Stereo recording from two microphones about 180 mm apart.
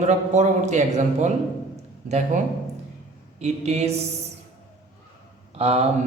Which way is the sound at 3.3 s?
40° right (ahead or behind).